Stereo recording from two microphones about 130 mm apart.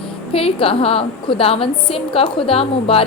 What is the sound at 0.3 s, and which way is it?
A woman's voice, 45° left (ahead or behind).